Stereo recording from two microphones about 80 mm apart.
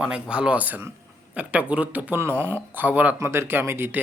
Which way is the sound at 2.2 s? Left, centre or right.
Right.